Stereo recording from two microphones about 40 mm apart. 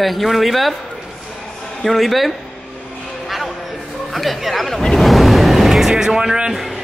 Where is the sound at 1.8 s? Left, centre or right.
Centre.